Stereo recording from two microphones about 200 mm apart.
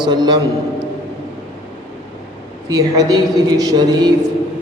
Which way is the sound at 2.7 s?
20° right (ahead or behind).